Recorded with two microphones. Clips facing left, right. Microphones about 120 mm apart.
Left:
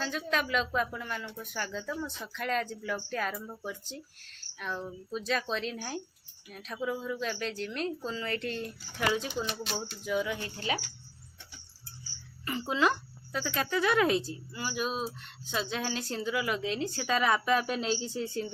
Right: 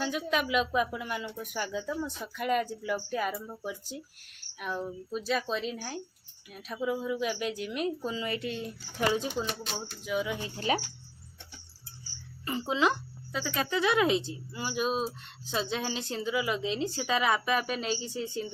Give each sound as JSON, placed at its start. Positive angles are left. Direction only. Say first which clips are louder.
{"t": 0.0, "sound": "speech", "louder": "right 2 dB", "side_deg": -10}
{"t": 9.0, "sound": "speech", "louder": "right 2 dB", "side_deg": -30}
{"t": 10.1, "sound": "speech", "louder": "even", "side_deg": -10}
{"t": 10.6, "sound": "speech", "louder": "right 6 dB", "side_deg": -30}
{"t": 12.5, "sound": "speech", "louder": "right 1 dB", "side_deg": -20}
{"t": 14.2, "sound": "speech", "louder": "even", "side_deg": -25}
{"t": 16.9, "sound": "speech", "louder": "left 1 dB", "side_deg": -15}